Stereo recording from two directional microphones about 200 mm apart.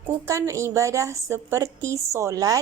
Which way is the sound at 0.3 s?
15° right (ahead or behind).